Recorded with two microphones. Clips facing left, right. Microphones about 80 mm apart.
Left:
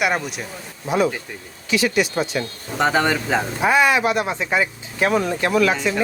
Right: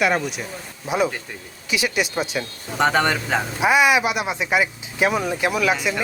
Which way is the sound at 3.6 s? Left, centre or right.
Centre.